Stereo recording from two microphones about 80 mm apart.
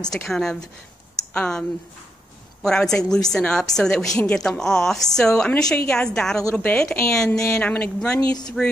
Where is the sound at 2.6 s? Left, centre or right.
Centre.